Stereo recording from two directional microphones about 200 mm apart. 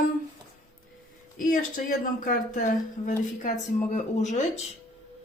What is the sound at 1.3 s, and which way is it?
Speech, 45° left (ahead or behind).